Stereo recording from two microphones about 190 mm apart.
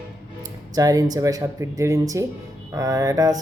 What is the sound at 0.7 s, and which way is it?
A woman's voice, 20° right (ahead or behind).